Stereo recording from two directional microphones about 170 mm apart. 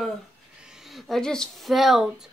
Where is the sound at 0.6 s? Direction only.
5° right (ahead or behind).